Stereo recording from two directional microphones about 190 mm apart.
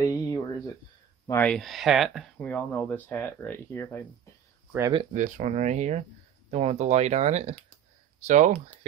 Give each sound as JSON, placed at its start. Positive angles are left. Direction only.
{"t": 0.0, "sound": "a sound", "side_deg": 20}
{"t": 1.2, "sound": "speech", "side_deg": 10}
{"t": 5.1, "sound": "speech", "side_deg": -40}